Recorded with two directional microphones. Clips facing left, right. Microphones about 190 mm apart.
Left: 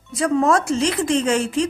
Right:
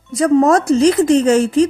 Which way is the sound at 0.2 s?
40° right (ahead or behind).